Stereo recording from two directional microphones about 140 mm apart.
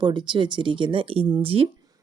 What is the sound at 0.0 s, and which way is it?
Speech, 35° right (ahead or behind).